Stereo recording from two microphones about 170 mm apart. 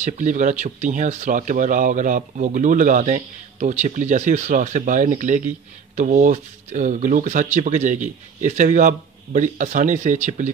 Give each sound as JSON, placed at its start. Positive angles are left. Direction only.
{"t": 0.0, "sound": "speech", "side_deg": -45}